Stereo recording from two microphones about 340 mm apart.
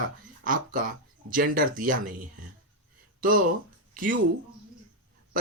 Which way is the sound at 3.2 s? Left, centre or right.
Right.